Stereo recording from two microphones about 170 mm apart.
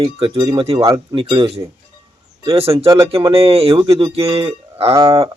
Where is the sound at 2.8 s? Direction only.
20° right (ahead or behind).